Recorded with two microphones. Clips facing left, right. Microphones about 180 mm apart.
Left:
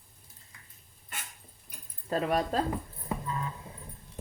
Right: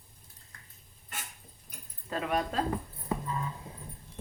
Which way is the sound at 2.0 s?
35° left (ahead or behind).